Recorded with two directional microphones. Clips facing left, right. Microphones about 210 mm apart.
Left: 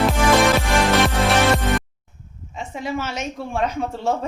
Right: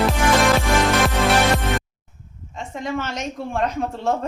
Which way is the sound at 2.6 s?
5° left (ahead or behind).